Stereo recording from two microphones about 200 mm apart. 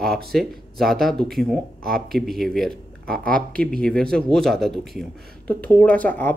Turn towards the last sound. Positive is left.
turn(degrees=10)  # may be behind; listen again after turning